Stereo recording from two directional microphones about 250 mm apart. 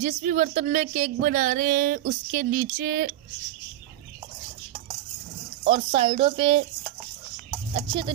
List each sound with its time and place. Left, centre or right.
0.0 s speech: right
5.7 s a woman's voice: right
7.7 s a woman's voice: centre